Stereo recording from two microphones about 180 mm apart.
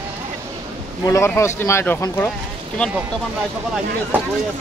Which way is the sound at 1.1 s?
15° left (ahead or behind).